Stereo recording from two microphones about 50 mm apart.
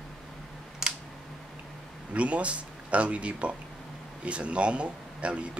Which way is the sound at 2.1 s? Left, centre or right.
Right.